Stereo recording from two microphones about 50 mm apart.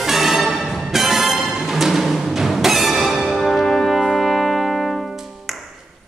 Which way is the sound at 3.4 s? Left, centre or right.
Centre.